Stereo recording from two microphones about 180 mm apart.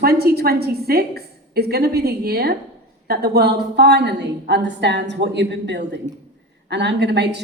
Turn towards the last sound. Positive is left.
turn(degrees=-70)  # may be behind; listen again after turning